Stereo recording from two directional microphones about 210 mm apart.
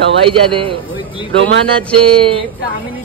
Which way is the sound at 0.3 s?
25° right (ahead or behind).